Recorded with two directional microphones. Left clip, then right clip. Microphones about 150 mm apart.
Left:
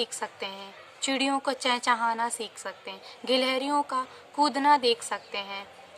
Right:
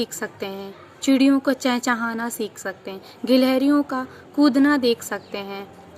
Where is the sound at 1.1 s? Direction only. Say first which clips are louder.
Right 8 dB; 40° left (ahead or behind).